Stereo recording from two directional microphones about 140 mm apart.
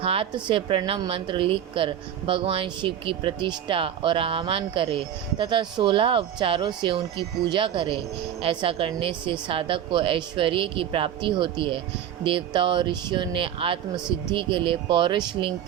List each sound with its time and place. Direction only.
0.0 s a woman's voice: 40° right (ahead or behind)